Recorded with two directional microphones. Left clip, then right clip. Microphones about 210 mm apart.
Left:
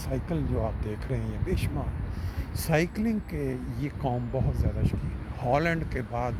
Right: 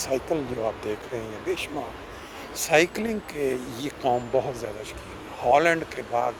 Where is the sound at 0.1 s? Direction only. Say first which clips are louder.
Right 5 dB; 15° right (ahead or behind).